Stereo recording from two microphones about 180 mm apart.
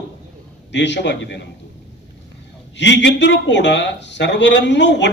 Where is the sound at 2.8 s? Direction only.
80° left.